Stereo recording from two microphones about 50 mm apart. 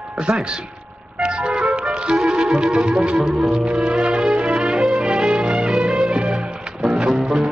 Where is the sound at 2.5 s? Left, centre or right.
Centre.